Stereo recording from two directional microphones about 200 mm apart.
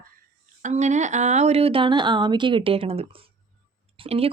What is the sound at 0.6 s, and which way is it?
A woman's voice, 35° right (ahead or behind).